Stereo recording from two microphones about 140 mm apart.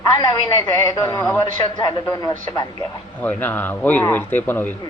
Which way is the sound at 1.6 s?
35° left (ahead or behind).